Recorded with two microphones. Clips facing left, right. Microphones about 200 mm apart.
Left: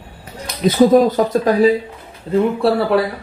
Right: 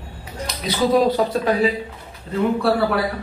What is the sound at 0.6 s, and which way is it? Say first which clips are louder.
Speech: left 6 dB; 45° left (ahead or behind).